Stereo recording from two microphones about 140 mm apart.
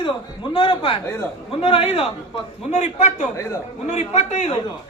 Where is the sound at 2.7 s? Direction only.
55° left (ahead or behind).